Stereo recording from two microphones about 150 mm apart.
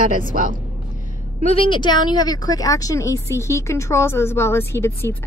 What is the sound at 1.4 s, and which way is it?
Speech, 40° left (ahead or behind).